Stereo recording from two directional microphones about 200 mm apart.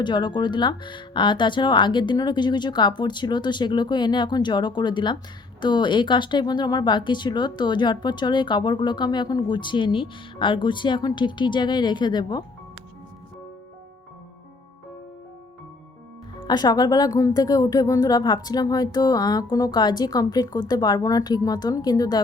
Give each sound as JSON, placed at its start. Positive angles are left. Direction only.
{"t": 0.0, "sound": "speech", "side_deg": 20}
{"t": 16.4, "sound": "speech", "side_deg": 20}